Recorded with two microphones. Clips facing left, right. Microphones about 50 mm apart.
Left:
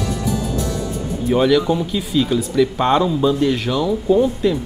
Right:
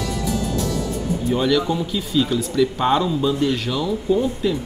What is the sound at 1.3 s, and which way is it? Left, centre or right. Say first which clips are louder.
Speech: left 5 dB; centre.